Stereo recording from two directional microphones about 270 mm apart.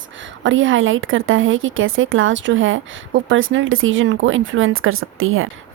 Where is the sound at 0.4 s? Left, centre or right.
Right.